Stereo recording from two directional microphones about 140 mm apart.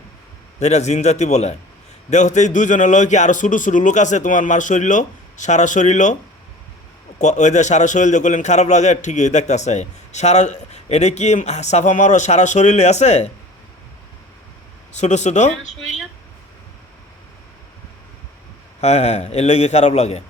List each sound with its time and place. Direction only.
0.6 s a man's voice: 55° left (ahead or behind)
7.2 s a man's voice: 55° left (ahead or behind)
14.9 s a man's voice: 55° left (ahead or behind)
18.8 s a man's voice: 50° left (ahead or behind)